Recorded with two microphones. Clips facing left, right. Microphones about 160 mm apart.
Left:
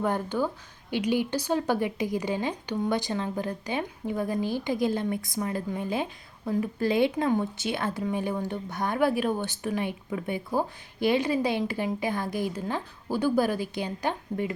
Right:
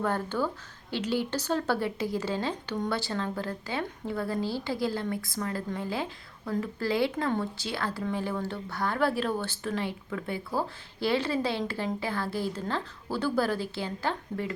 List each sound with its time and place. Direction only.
0.0 s speech: 15° left (ahead or behind)